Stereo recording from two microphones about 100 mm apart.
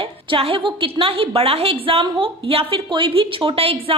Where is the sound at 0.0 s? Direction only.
65° right (ahead or behind).